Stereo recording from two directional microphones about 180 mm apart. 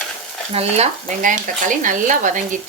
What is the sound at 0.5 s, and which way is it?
Speech, 35° right (ahead or behind).